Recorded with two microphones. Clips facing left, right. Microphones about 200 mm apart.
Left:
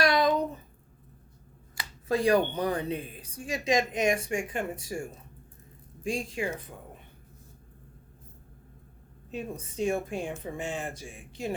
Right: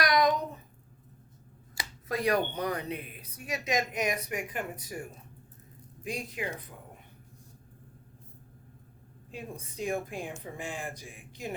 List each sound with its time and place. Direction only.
0.0 s a sound: 30° left (ahead or behind)
2.0 s a woman's voice: 30° left (ahead or behind)
9.3 s a woman's voice: 25° left (ahead or behind)